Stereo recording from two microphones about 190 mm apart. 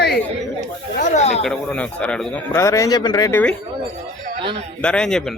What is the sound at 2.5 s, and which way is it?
Speech, 15° left (ahead or behind).